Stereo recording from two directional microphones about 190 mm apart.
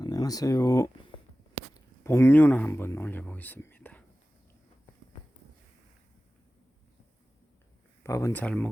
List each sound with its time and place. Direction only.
0.0 s speech: 20° left (ahead or behind)
8.0 s speech: 15° left (ahead or behind)